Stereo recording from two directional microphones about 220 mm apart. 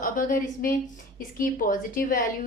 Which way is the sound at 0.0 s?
40° left (ahead or behind).